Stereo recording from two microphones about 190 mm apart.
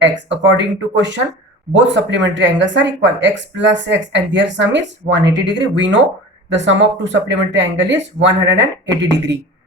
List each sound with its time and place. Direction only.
0.0 s speech: 70° right (ahead or behind)